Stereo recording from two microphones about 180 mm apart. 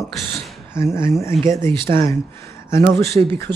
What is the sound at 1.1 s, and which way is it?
Mantra, 15° left (ahead or behind).